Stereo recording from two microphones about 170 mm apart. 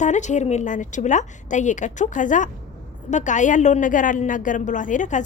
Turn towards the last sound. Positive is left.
turn(degrees=45)  # may be behind; listen again after turning